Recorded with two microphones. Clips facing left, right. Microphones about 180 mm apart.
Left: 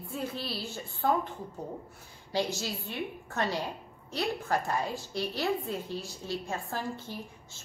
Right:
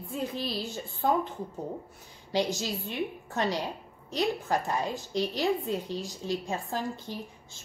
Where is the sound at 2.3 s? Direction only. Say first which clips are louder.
Right 3 dB; 15° right (ahead or behind).